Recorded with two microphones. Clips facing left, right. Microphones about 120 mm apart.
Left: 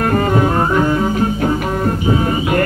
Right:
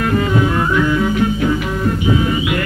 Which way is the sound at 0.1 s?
45° left (ahead or behind).